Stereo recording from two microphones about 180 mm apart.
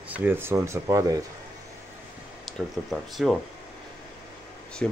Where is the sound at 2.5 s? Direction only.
Centre (ahead or behind).